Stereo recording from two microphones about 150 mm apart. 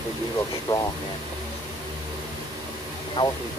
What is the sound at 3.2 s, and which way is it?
Speech, 30° left (ahead or behind).